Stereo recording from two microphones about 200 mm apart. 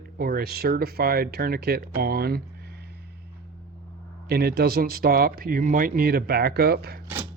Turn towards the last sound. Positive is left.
turn(degrees=-50)  # may be behind; listen again after turning